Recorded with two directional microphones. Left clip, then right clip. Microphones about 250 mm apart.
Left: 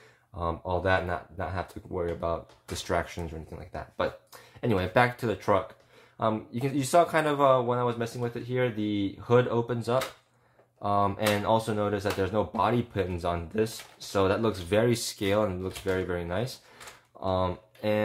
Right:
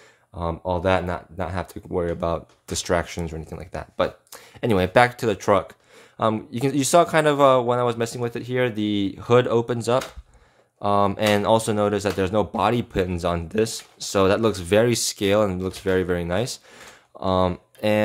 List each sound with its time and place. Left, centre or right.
0.4 s speech: right